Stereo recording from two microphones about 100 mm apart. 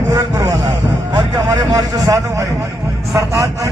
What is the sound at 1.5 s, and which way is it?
Speech, 40° right (ahead or behind).